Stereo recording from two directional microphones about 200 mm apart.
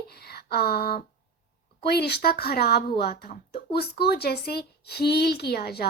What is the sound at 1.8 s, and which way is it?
A woman's voice, 55° left (ahead or behind).